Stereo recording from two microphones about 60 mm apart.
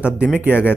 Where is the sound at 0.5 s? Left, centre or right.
Left.